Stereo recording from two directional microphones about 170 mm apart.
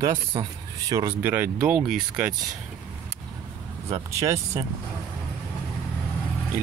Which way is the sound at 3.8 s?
15° right (ahead or behind).